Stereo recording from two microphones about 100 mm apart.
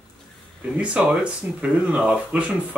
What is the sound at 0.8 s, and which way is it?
Speech, 10° right (ahead or behind).